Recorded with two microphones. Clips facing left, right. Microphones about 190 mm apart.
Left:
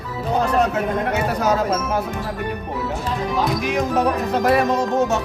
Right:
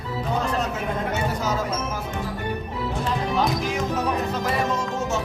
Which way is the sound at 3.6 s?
65° left (ahead or behind).